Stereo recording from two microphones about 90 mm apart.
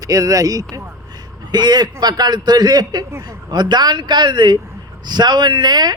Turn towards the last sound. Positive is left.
turn(degrees=-50)  # may be behind; listen again after turning